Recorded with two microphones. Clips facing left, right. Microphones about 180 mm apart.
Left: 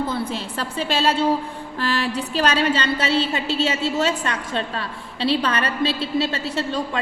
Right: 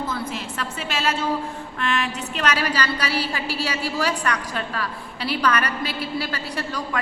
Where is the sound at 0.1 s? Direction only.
30° left (ahead or behind).